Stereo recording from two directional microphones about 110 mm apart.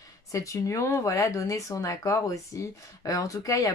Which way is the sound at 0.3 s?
30° left (ahead or behind).